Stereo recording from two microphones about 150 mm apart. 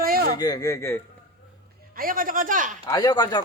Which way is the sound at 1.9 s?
70° right (ahead or behind).